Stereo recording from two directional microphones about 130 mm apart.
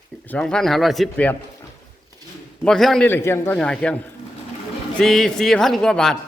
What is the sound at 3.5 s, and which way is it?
Speech, 10° left (ahead or behind).